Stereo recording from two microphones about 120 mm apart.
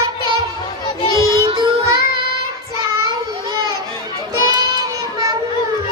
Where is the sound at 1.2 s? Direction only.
25° left (ahead or behind).